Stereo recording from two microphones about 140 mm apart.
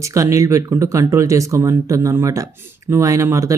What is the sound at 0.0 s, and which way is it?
Speech, 20° right (ahead or behind).